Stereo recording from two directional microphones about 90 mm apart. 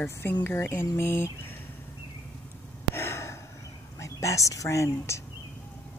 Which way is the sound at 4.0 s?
35° left (ahead or behind).